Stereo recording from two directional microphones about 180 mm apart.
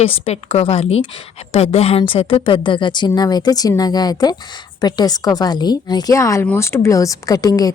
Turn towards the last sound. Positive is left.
turn(degrees=20)  # may be behind; listen again after turning